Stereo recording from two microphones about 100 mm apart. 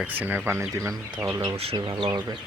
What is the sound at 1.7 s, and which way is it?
Speech, 50° right (ahead or behind).